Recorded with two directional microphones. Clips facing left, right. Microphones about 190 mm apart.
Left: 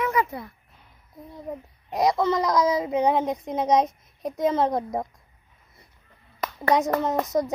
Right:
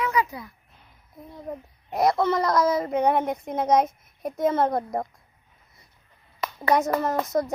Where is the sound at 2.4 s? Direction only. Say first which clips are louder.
Even; 15° left (ahead or behind).